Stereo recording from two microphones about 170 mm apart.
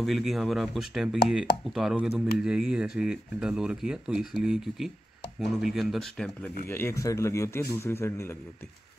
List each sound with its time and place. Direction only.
0.0 s speech: centre (ahead or behind)
6.7 s a man's voice: 15° left (ahead or behind)